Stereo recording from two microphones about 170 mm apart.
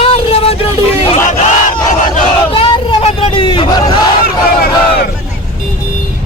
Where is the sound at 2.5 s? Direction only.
30° left (ahead or behind).